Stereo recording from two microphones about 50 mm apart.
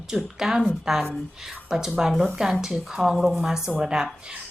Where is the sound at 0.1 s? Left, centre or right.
Centre.